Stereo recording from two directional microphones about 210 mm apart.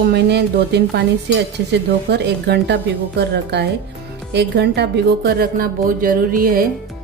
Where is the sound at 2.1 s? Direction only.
55° right (ahead or behind).